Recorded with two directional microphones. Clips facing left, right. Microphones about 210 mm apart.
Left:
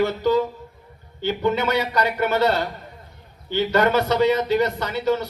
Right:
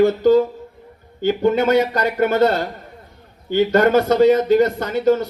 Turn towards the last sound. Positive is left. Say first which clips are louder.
# right 5 dB
turn(degrees=-50)  # may be behind; listen again after turning